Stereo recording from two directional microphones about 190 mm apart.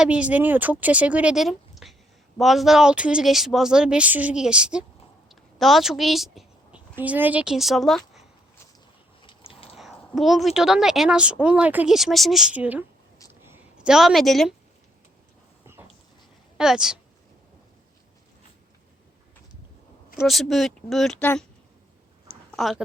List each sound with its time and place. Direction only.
0.0 s a woman's voice: 5° right (ahead or behind)
5.3 s a sound: centre (ahead or behind)
7.0 s a woman's voice: 10° right (ahead or behind)
9.2 s a sound: 30° left (ahead or behind)
9.7 s a woman's voice: centre (ahead or behind)
13.4 s a sound: 10° right (ahead or behind)
16.6 s a woman's voice: 5° right (ahead or behind)
20.2 s a woman's voice: centre (ahead or behind)
22.5 s speech: centre (ahead or behind)